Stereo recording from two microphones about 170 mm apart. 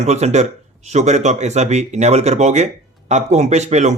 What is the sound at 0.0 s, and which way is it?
Speech, 40° right (ahead or behind).